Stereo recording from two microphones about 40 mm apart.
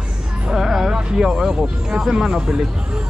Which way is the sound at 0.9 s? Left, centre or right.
Centre.